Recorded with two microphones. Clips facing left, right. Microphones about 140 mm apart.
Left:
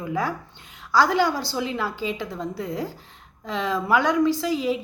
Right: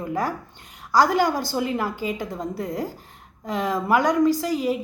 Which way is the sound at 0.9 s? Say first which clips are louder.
Right 1 dB; 45° right (ahead or behind).